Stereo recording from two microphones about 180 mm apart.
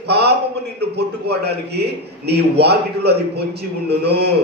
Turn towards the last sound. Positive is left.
turn(degrees=-65)  # may be behind; listen again after turning